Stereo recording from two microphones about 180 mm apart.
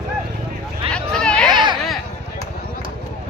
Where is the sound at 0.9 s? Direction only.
5° left (ahead or behind).